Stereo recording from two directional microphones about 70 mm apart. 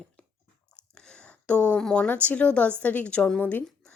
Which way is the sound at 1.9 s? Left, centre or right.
Centre.